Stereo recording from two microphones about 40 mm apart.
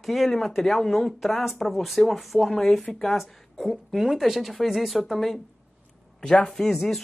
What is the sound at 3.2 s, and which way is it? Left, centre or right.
A woman's voice, centre.